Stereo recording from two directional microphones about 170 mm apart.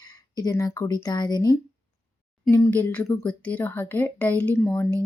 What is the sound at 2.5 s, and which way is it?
A woman's voice, 10° left (ahead or behind).